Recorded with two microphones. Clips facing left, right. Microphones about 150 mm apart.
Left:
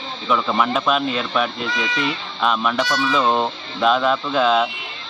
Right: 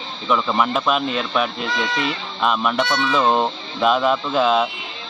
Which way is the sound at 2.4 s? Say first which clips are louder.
Even; 5° right (ahead or behind).